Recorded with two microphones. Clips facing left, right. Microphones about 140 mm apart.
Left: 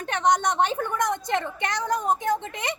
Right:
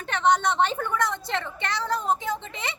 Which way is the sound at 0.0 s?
15° left (ahead or behind).